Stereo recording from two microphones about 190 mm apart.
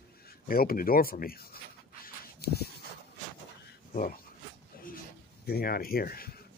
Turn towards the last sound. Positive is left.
turn(degrees=50)  # may be behind; listen again after turning